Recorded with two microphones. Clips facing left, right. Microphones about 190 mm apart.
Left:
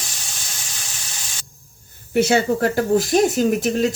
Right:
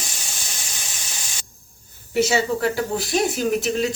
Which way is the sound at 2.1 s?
55° left (ahead or behind).